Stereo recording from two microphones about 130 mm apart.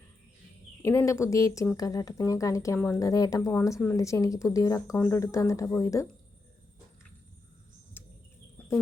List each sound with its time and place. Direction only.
0.8 s speech: 20° left (ahead or behind)
4.9 s speech: 15° left (ahead or behind)
8.0 s bird: 15° left (ahead or behind)